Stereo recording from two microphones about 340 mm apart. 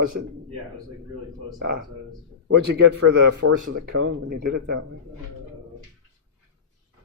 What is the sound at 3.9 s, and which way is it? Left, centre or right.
Speech, right.